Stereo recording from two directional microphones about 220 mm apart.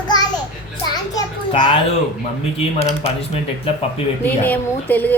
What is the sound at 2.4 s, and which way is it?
Speech, 25° left (ahead or behind).